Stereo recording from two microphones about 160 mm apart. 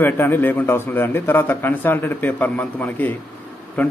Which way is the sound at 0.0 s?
15° left (ahead or behind).